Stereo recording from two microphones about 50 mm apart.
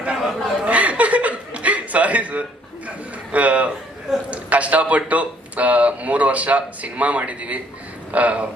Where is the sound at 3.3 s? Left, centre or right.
Right.